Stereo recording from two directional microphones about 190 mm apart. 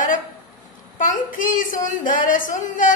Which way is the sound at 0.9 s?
45° left (ahead or behind).